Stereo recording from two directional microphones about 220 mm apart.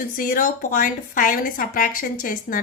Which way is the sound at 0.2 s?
40° left (ahead or behind).